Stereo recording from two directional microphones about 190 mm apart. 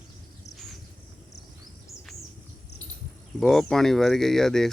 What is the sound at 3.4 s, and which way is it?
Speech, centre (ahead or behind).